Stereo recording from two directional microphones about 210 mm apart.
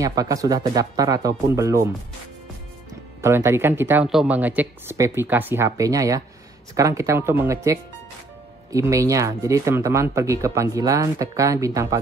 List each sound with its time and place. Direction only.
0.0 s speech: 15° right (ahead or behind)
3.2 s speech: 10° right (ahead or behind)